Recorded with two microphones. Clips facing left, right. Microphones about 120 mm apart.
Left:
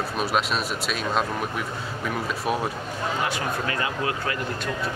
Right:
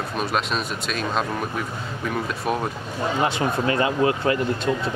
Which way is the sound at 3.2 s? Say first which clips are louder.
Right 7 dB; 25° right (ahead or behind).